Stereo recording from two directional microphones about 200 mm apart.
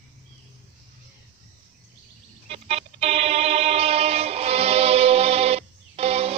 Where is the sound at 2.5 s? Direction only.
30° right (ahead or behind).